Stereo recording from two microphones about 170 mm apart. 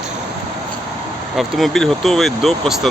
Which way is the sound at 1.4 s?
Centre (ahead or behind).